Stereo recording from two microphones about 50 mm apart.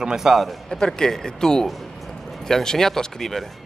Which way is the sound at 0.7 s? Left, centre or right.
Centre.